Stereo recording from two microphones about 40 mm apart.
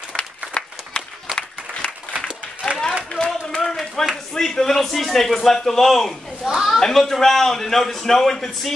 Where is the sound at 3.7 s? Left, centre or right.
Centre.